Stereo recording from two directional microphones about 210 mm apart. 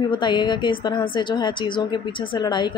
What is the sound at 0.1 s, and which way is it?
A woman's voice, 20° left (ahead or behind).